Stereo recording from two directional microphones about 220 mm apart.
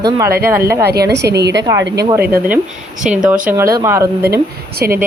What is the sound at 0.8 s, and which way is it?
Speech, 45° right (ahead or behind).